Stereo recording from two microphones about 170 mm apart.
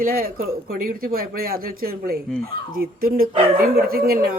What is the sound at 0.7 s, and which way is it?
Speech, 60° right (ahead or behind).